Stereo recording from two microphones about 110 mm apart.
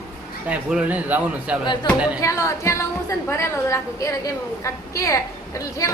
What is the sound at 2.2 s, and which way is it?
A woman's voice, 25° left (ahead or behind).